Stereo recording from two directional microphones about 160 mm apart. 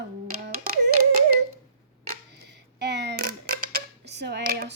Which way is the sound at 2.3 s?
90° right.